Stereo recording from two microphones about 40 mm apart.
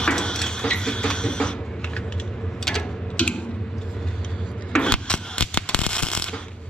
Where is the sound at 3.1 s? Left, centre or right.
Left.